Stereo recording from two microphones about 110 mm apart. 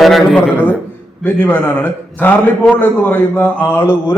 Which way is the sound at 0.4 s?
10° right (ahead or behind).